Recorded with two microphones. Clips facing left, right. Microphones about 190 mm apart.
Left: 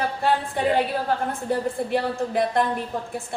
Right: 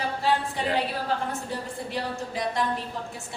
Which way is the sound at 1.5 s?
50° left (ahead or behind).